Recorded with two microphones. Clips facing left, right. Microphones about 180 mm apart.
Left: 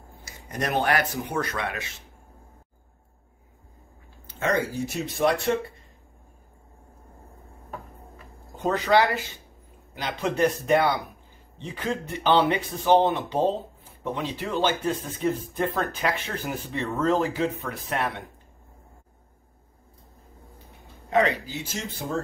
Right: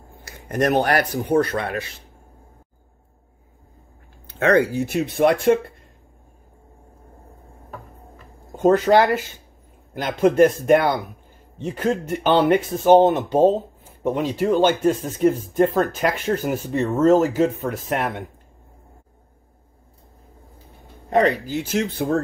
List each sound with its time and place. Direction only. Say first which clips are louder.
0.2 s speech: right 9 dB; 50° right (ahead or behind); by 1.7 s 30° right (ahead or behind)
4.3 s speech: right 8 dB; 65° right (ahead or behind)
8.6 s speech: right 6 dB; 45° right (ahead or behind)
21.1 s speech: right 5 dB; 40° right (ahead or behind); by 22.0 s 60° right (ahead or behind)